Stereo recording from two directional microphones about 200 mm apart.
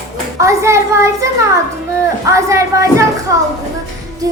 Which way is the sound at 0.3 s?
15° right (ahead or behind).